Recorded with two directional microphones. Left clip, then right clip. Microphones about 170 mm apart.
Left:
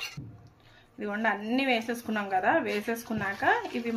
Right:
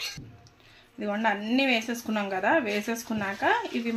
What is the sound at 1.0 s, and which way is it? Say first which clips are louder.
Speech: right 2 dB; 25° right (ahead or behind).